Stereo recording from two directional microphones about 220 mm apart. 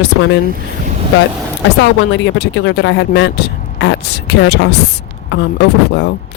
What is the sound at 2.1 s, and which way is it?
Speech, 55° left (ahead or behind).